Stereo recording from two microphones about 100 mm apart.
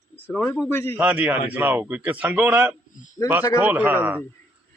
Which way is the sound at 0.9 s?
15° right (ahead or behind).